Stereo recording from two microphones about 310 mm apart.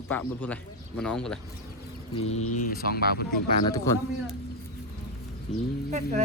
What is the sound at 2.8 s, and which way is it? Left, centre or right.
Speech, left.